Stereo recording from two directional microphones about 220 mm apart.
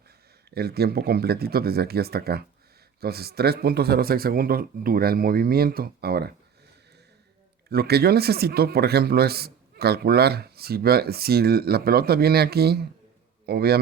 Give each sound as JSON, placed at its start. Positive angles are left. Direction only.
{"t": 0.5, "sound": "speech", "side_deg": -45}
{"t": 7.7, "sound": "a man's voice", "side_deg": -45}